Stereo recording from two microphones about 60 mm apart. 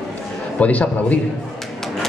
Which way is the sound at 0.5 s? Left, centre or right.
Left.